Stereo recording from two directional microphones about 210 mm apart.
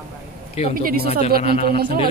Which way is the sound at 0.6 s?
30° left (ahead or behind).